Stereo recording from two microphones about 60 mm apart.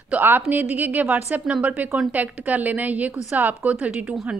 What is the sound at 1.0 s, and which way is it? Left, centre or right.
A woman's voice, centre.